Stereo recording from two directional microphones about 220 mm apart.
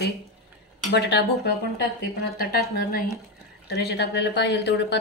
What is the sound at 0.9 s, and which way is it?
Speech, 45° left (ahead or behind).